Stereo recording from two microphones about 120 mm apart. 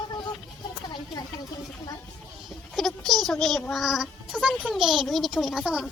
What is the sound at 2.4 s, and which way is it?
A child's voice, centre (ahead or behind).